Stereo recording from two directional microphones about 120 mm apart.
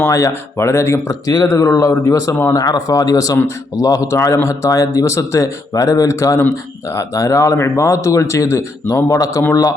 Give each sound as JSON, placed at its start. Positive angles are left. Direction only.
{"t": 0.0, "sound": "speech", "side_deg": 25}